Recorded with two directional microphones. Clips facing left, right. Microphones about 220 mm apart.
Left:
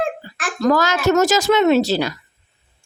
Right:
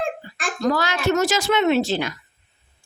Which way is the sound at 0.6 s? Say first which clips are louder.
Left 5 dB; 45° left (ahead or behind).